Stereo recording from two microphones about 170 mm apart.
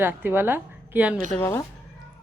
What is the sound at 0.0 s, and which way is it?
A woman's voice, 10° right (ahead or behind).